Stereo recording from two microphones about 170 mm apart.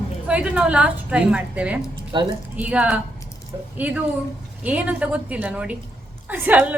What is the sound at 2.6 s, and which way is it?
A woman's voice, 5° right (ahead or behind).